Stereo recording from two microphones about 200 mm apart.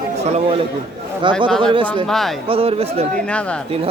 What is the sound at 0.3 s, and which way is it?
A man's voice, 30° right (ahead or behind).